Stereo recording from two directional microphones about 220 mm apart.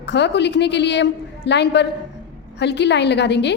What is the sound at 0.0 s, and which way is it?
A woman's voice, 50° left (ahead or behind).